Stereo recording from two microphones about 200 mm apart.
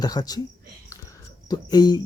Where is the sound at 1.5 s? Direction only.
20° left (ahead or behind).